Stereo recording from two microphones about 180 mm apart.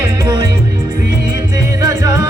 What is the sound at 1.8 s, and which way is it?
Music, 20° right (ahead or behind).